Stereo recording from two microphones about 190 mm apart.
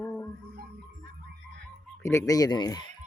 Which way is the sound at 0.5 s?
50° right (ahead or behind).